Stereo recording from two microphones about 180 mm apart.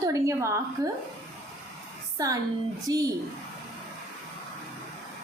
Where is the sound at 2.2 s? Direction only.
20° right (ahead or behind).